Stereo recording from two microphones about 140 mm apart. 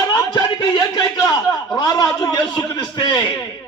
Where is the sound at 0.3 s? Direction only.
35° left (ahead or behind).